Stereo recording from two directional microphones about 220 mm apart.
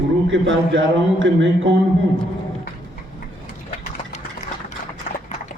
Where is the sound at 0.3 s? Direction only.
55° right (ahead or behind).